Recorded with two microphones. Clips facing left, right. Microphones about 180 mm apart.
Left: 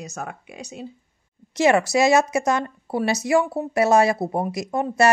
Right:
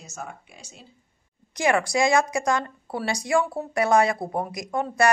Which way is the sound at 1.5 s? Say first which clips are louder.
Left 4 dB; 25° left (ahead or behind).